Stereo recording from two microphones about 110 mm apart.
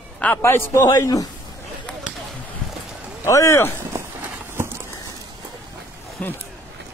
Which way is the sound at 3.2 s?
25° left (ahead or behind).